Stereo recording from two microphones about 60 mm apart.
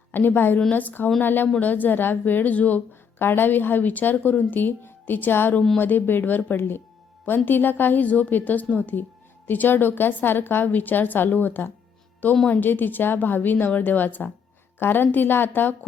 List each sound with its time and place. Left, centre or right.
0.1 s a woman's voice: left
3.2 s a woman's voice: left